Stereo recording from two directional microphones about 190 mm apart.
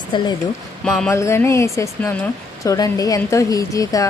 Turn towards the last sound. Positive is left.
turn(degrees=20)  # may be behind; listen again after turning